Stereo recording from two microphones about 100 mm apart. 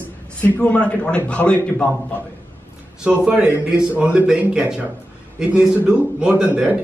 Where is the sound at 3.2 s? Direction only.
10° right (ahead or behind).